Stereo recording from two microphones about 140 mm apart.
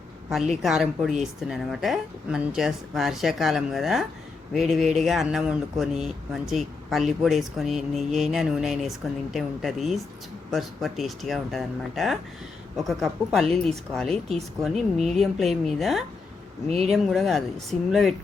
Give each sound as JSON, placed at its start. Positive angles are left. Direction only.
{"t": 0.3, "sound": "speech", "side_deg": 0}
{"t": 16.6, "sound": "speech", "side_deg": -50}
{"t": 16.9, "sound": "speech", "side_deg": 0}